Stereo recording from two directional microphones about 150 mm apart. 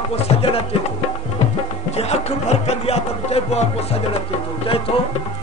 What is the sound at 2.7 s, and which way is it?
Music, 45° left (ahead or behind).